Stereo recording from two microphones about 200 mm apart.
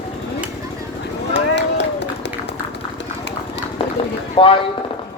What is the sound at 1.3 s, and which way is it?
Run, 60° left (ahead or behind).